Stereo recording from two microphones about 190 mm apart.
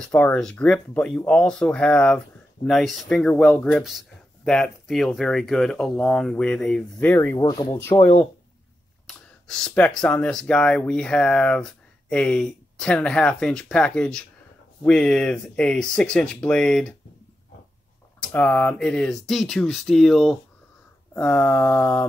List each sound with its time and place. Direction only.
0.0 s speech: 5° left (ahead or behind)
7.3 s speech: 20° left (ahead or behind)
9.0 s speech: centre (ahead or behind)
18.3 s speech: 5° left (ahead or behind)
21.1 s a sound: 10° left (ahead or behind)